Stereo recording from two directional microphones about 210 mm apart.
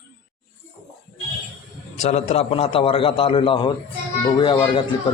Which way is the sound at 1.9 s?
35° left (ahead or behind).